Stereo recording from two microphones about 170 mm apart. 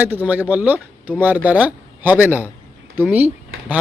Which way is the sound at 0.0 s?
10° right (ahead or behind).